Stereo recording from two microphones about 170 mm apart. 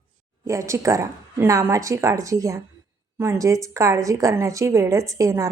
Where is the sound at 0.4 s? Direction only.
15° right (ahead or behind).